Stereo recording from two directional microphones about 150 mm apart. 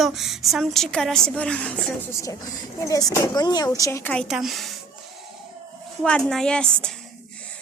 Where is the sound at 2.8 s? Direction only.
20° left (ahead or behind).